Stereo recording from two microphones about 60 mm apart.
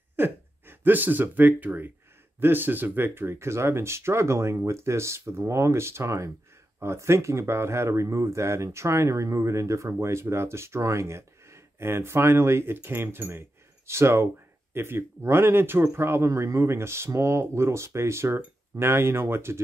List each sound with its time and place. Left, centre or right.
0.1 s speech: right